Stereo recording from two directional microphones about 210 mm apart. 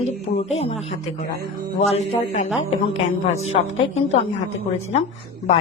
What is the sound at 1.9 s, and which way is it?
Speech, 30° left (ahead or behind).